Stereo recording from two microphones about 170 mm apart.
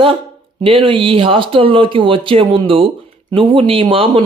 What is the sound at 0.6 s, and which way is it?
Speech, 30° right (ahead or behind).